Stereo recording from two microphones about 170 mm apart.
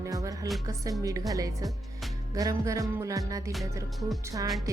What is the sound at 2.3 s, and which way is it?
Music, 20° right (ahead or behind).